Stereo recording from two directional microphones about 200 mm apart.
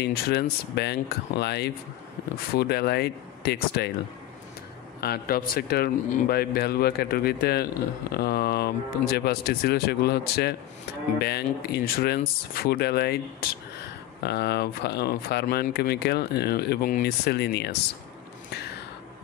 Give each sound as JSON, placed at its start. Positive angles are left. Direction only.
{"t": 0.0, "sound": "speech", "side_deg": 55}
{"t": 5.0, "sound": "speech", "side_deg": 50}